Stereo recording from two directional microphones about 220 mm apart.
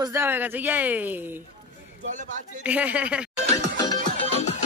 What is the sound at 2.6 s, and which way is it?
Speech, 5° right (ahead or behind).